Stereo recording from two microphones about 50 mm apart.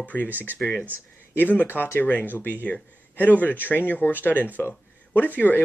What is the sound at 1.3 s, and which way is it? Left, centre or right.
Speech, left.